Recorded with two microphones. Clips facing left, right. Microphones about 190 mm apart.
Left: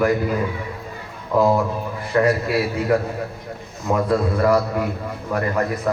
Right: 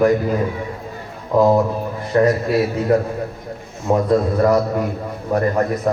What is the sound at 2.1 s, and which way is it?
A man's voice, 35° right (ahead or behind).